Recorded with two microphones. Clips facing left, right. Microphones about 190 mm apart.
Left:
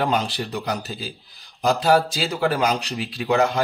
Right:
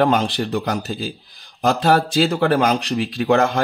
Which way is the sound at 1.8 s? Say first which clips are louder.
Right 4 dB; 60° right (ahead or behind).